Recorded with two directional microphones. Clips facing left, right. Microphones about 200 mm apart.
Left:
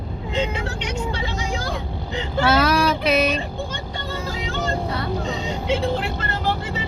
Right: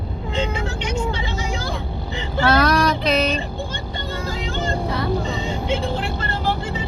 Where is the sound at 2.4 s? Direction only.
5° left (ahead or behind).